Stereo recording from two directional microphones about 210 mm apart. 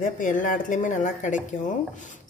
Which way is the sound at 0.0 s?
40° left (ahead or behind).